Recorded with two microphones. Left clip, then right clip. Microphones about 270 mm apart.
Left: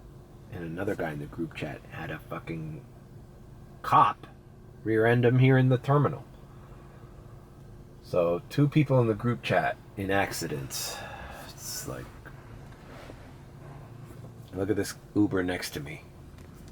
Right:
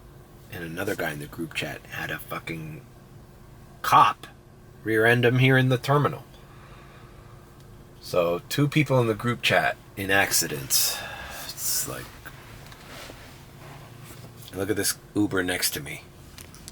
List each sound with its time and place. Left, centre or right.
0.5 s speech: centre
3.8 s speech: centre
8.1 s speech: centre
12.9 s a sound: centre
14.5 s speech: centre